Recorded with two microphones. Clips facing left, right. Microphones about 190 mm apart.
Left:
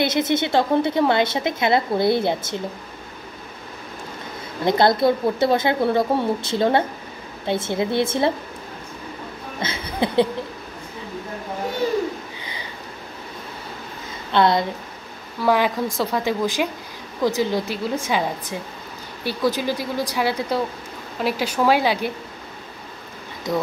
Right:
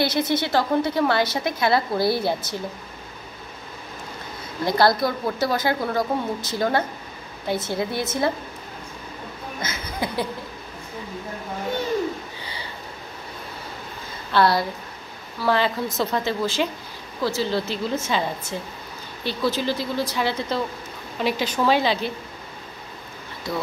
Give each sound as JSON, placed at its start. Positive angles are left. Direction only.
{"t": 0.0, "sound": "a woman's voice", "side_deg": 20}
{"t": 4.6, "sound": "a woman's voice", "side_deg": 20}
{"t": 9.6, "sound": "chuckle", "side_deg": 25}
{"t": 14.3, "sound": "a woman's voice", "side_deg": 20}